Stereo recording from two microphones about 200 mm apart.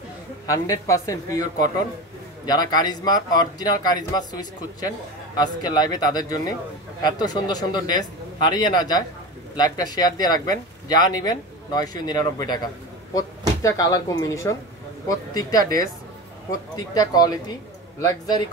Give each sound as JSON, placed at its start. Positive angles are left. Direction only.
{"t": 0.5, "sound": "speech", "side_deg": 15}
{"t": 13.6, "sound": "speech", "side_deg": 15}